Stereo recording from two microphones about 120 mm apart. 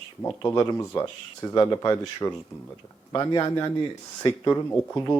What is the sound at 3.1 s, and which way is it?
Speech, 35° left (ahead or behind).